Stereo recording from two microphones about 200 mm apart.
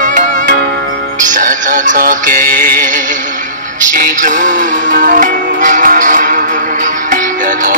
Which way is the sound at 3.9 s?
40° right (ahead or behind).